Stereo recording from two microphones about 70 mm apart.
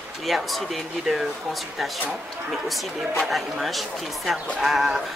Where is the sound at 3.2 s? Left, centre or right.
Centre.